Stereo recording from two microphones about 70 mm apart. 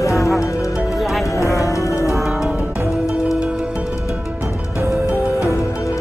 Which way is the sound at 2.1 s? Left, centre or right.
Centre.